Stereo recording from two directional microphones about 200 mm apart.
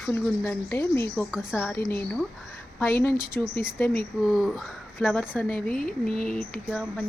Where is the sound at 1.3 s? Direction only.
5° right (ahead or behind).